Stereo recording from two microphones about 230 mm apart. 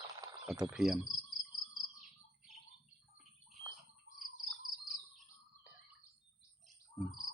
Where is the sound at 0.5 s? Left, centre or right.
Centre.